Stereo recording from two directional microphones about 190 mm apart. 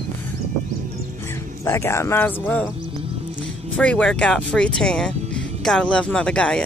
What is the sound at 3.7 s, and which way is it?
Speech, 5° left (ahead or behind).